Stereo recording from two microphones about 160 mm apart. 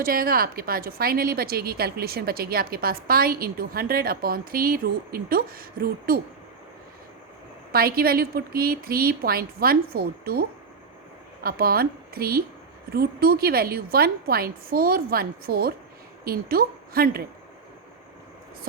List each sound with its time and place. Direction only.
0.0 s a woman's voice: 65° right (ahead or behind)
7.7 s a woman's voice: 70° right (ahead or behind)
11.4 s a woman's voice: 70° right (ahead or behind)